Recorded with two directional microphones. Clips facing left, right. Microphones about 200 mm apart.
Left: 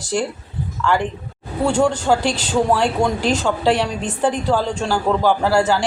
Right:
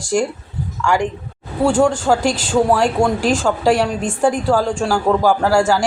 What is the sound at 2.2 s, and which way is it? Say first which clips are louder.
Speech: right 3 dB; 45° right (ahead or behind).